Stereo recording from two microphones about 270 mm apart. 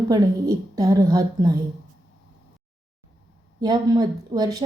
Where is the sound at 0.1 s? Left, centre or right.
Centre.